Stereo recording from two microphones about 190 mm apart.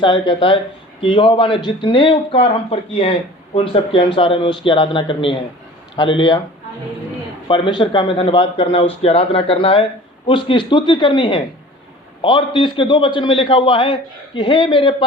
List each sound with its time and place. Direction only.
0.0 s speech: 25° left (ahead or behind)
7.4 s speech: 25° left (ahead or behind)